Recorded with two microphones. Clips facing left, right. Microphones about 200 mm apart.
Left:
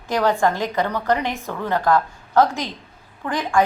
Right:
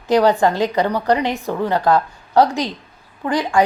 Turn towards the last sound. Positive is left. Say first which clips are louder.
# right 3 dB
turn(degrees=-15)  # may be behind; listen again after turning